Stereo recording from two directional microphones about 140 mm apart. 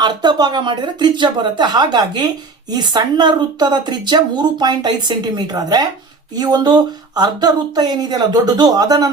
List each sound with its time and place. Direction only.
0.0 s speech: 30° right (ahead or behind)